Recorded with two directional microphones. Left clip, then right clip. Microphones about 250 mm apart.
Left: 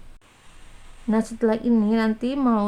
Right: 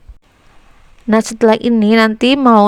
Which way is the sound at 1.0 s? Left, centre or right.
Right.